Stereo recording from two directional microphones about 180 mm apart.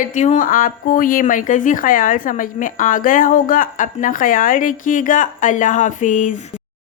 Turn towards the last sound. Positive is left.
turn(degrees=45)  # may be behind; listen again after turning